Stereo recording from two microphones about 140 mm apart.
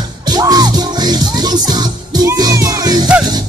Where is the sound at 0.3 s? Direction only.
25° right (ahead or behind).